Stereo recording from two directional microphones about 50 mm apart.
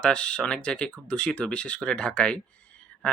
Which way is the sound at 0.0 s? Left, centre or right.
Centre.